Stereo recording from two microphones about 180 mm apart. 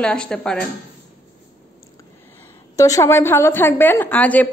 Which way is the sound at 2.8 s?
15° left (ahead or behind).